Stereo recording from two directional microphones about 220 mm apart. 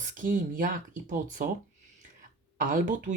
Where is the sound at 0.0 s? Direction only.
35° right (ahead or behind).